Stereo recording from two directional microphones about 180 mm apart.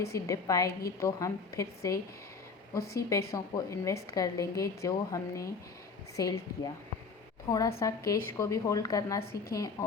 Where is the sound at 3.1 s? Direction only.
20° left (ahead or behind).